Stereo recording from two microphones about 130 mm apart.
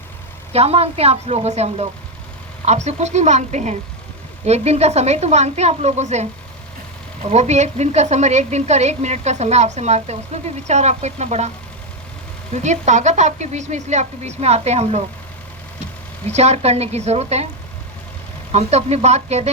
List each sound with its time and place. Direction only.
0.5 s a woman's voice: 50° right (ahead or behind)
7.3 s speech: 60° right (ahead or behind)
12.6 s speech: 65° right (ahead or behind)
16.2 s speech: 55° right (ahead or behind)
18.5 s speech: 55° right (ahead or behind)